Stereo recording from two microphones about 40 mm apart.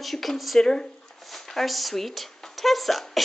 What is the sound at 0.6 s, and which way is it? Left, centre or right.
Speech, centre.